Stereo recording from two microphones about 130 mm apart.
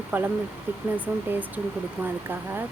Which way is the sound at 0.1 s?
15° right (ahead or behind).